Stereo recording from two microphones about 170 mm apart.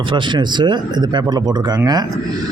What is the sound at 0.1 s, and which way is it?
Speech, 25° right (ahead or behind).